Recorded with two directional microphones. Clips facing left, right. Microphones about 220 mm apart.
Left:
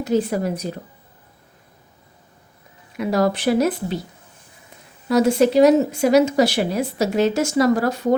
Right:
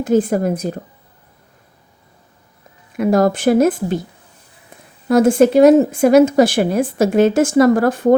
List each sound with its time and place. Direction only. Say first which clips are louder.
0.0 s speech: right 5 dB; 50° right (ahead or behind)
2.9 s speech: right 5 dB; 50° right (ahead or behind)
5.0 s speech: right 4 dB; 50° right (ahead or behind)